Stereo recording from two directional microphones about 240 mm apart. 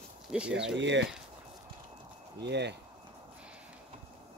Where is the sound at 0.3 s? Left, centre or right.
Centre.